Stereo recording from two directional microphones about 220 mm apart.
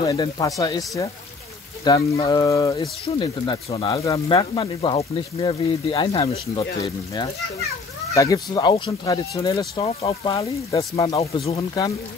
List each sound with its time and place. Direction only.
0.0 s speech: 20° left (ahead or behind)
8.1 s speech: 15° left (ahead or behind)